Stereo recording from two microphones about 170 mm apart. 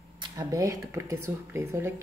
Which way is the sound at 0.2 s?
20° right (ahead or behind).